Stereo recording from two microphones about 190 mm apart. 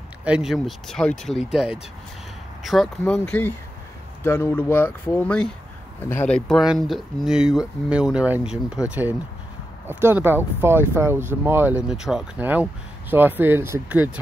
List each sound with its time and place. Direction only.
0.2 s speech: 5° right (ahead or behind)